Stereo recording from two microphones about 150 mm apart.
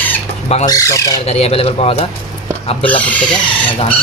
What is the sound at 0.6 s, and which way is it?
Speech, 20° left (ahead or behind).